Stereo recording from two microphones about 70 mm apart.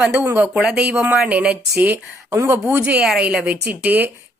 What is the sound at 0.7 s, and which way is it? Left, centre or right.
Speech, right.